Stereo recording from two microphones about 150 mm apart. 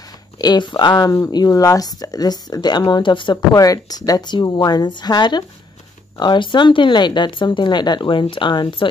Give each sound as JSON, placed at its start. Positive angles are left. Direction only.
{"t": 0.4, "sound": "speech", "side_deg": 30}